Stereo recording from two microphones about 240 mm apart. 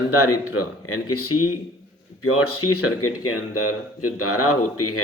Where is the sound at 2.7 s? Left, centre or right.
Left.